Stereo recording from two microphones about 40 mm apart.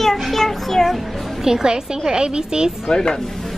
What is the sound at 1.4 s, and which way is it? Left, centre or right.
A woman's voice, centre.